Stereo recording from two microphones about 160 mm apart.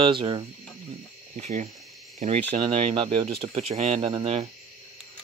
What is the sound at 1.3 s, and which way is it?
Speech, 45° right (ahead or behind).